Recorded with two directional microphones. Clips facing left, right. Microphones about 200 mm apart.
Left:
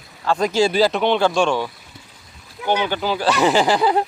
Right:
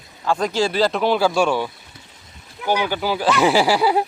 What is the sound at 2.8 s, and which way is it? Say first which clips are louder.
Speech: even; 10° right (ahead or behind).